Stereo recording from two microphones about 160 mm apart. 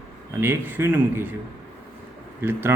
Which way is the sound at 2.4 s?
15° right (ahead or behind).